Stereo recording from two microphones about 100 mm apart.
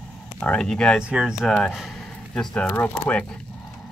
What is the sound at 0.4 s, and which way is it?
Speech, 10° left (ahead or behind).